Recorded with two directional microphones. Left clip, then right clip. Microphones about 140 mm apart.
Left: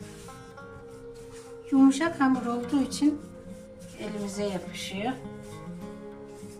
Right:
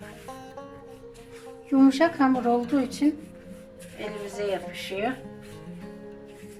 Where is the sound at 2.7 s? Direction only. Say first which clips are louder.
Right 1 dB; centre (ahead or behind).